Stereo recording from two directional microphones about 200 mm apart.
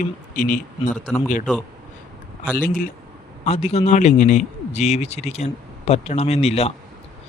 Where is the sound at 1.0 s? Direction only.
5° left (ahead or behind).